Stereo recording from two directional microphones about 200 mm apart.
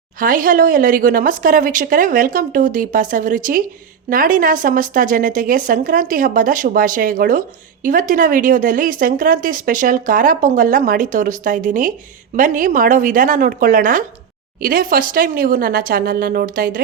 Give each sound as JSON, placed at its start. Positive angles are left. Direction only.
{"t": 0.2, "sound": "speech", "side_deg": -45}